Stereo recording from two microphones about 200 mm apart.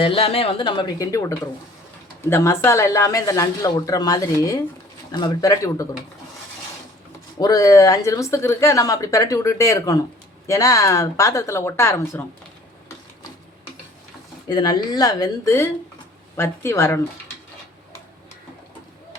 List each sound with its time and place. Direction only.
0.0 s speech: 25° left (ahead or behind)
2.3 s speech: 15° left (ahead or behind)
7.3 s speech: 20° left (ahead or behind)
14.4 s speech: 20° left (ahead or behind)